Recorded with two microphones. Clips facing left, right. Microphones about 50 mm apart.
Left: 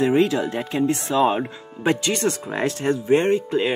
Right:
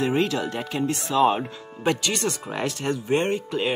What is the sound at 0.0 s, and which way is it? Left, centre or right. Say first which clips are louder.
Speech: left 5 dB; centre.